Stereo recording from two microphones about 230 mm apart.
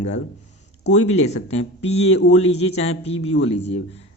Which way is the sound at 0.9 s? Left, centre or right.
Left.